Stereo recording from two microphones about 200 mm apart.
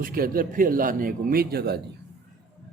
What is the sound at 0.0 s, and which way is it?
A man's voice, 45° right (ahead or behind).